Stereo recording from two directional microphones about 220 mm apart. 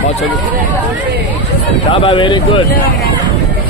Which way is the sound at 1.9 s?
20° left (ahead or behind).